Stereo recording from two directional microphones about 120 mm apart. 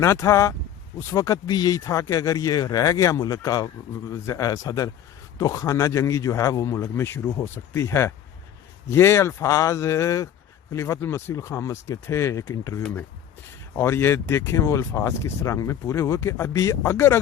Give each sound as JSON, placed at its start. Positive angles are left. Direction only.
{"t": 0.0, "sound": "speech", "side_deg": 25}